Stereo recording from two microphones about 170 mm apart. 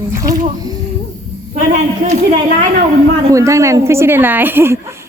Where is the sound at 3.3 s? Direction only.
20° right (ahead or behind).